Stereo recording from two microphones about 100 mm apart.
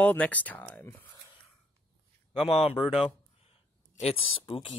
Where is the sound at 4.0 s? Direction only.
80° left; by 4.7 s 60° left (ahead or behind).